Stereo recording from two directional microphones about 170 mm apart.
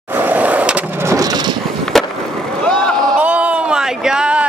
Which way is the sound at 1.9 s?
Centre (ahead or behind).